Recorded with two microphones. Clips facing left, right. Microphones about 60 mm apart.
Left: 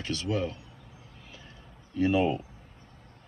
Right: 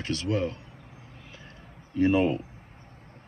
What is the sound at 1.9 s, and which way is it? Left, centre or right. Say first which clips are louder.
Speech: right 2 dB; right.